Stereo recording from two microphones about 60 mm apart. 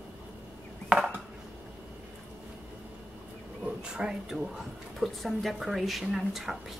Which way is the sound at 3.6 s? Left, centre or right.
Centre.